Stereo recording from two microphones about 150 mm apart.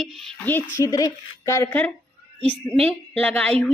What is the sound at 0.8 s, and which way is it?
A woman's voice, 25° left (ahead or behind).